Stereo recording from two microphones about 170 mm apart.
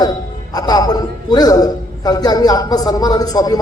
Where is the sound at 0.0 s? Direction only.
25° left (ahead or behind).